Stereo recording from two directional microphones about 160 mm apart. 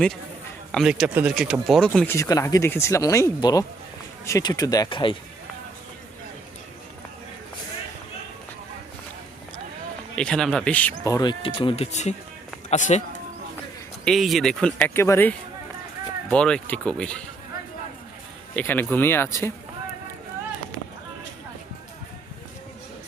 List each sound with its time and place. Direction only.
0.7 s speech: centre (ahead or behind)
2.1 s speech: 20° left (ahead or behind)
10.2 s speech: 5° left (ahead or behind); by 13.0 s 50° left (ahead or behind)
14.0 s speech: centre (ahead or behind)
18.5 s speech: 10° left (ahead or behind)